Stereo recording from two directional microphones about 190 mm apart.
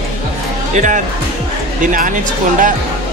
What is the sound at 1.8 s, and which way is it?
Speech, 45° right (ahead or behind).